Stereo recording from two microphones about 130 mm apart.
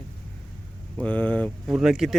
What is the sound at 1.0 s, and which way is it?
Speech, 10° left (ahead or behind).